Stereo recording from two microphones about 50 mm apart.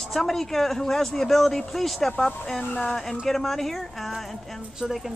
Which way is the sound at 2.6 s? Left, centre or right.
Left.